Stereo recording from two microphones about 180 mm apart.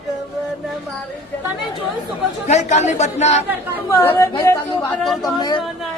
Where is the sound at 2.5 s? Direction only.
40° left (ahead or behind).